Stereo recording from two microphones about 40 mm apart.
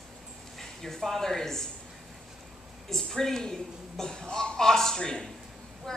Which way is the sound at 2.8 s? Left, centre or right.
Centre.